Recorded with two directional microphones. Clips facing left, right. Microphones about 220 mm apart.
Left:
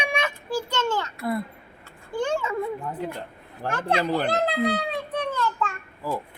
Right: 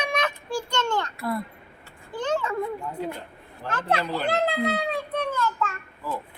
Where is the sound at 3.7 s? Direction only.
15° left (ahead or behind).